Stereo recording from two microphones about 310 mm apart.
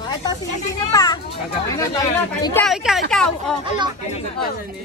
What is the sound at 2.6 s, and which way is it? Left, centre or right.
Speech, centre.